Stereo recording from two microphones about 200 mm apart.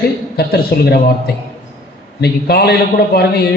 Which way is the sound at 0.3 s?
55° left (ahead or behind).